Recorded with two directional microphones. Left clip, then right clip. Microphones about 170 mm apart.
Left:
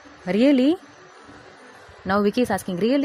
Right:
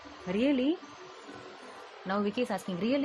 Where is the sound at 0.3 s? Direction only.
60° left (ahead or behind).